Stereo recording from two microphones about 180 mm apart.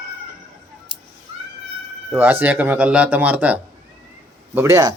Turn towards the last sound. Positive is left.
turn(degrees=-20)  # may be behind; listen again after turning